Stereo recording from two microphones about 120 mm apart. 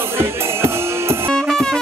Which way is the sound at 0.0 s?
20° right (ahead or behind).